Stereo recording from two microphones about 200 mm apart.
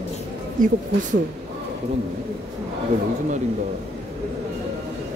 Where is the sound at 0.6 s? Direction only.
45° right (ahead or behind).